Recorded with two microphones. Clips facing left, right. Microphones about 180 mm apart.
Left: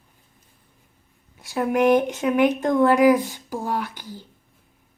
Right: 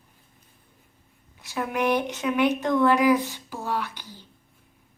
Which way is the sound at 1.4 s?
40° left (ahead or behind).